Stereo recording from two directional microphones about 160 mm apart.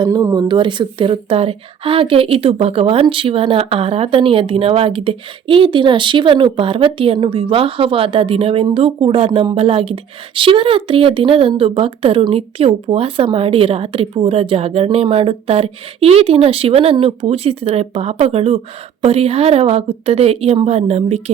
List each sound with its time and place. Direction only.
0.0 s speech: 25° right (ahead or behind); by 21.2 s 40° right (ahead or behind)